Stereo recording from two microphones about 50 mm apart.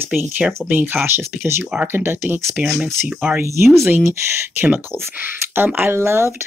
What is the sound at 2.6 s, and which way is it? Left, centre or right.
Speech, right.